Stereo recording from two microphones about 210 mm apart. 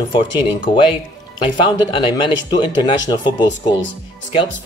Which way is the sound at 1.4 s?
25° left (ahead or behind).